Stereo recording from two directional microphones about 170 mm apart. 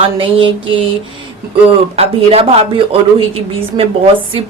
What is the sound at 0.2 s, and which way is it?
Mantra, 30° right (ahead or behind).